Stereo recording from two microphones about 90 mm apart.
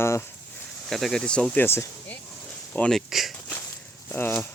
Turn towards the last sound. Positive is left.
turn(degrees=25)  # may be behind; listen again after turning